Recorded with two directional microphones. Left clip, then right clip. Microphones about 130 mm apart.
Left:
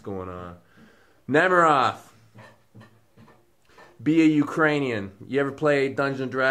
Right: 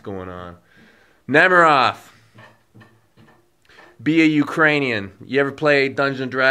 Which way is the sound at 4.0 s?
15° right (ahead or behind).